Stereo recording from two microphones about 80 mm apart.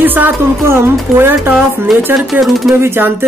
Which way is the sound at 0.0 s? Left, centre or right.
Right.